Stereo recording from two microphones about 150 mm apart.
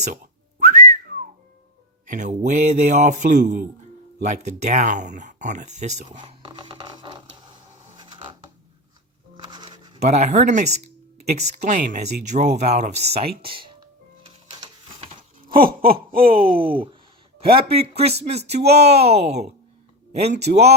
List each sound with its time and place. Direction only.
0.6 s whistling: 55° right (ahead or behind)
2.0 s speech: 60° right (ahead or behind)
6.1 s mechanisms: 30° right (ahead or behind)
7.9 s a sound: 35° right (ahead or behind)
9.4 s music: 30° right (ahead or behind)
9.7 s writing: 30° right (ahead or behind)
10.0 s speech: 50° right (ahead or behind)
13.4 s music: 35° right (ahead or behind)
15.5 s a sound: 75° right (ahead or behind)
16.4 s speech: 35° right (ahead or behind)